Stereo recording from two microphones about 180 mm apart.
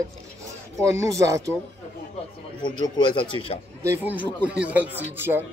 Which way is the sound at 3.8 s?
10° right (ahead or behind).